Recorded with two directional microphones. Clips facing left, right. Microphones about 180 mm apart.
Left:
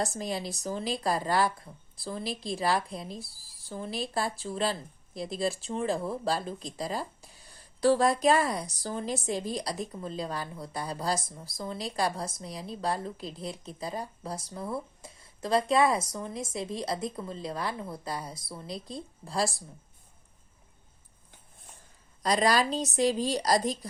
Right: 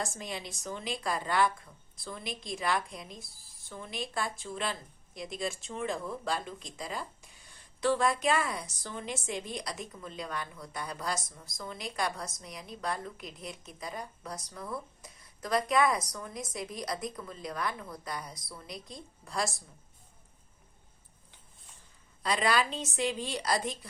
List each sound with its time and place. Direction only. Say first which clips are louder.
0.0 s speech: left 6 dB; 35° left (ahead or behind)
22.2 s speech: left 4 dB; 40° left (ahead or behind)